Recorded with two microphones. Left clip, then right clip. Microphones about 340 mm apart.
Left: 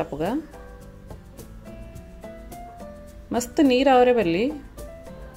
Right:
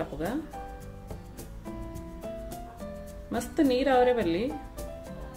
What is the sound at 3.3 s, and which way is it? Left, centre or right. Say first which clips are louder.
A woman's voice: left 6 dB; left.